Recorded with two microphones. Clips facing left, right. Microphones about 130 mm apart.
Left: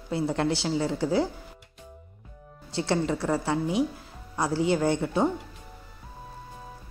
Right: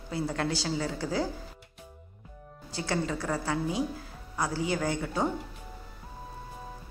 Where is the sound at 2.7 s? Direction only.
25° left (ahead or behind).